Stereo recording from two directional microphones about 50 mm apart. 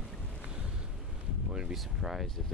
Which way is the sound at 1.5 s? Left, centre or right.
Centre.